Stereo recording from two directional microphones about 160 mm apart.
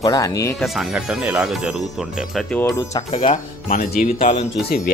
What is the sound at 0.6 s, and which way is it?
Speech, centre (ahead or behind).